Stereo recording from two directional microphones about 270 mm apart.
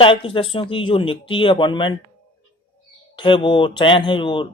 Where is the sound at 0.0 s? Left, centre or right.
Centre.